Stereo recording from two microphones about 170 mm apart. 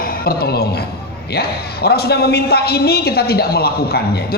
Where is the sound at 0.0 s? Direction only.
60° left (ahead or behind).